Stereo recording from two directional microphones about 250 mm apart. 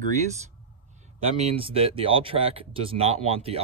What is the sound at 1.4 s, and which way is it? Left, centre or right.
Speech, right.